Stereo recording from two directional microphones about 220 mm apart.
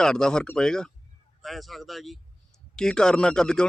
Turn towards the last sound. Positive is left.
turn(degrees=5)  # may be behind; listen again after turning